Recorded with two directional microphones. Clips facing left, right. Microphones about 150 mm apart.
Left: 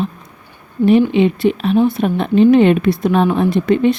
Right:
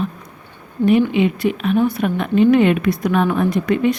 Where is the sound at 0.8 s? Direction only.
30° left (ahead or behind).